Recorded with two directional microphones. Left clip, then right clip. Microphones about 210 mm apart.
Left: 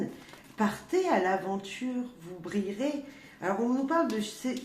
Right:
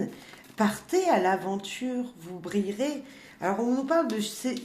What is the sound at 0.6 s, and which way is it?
A woman's voice, 45° right (ahead or behind).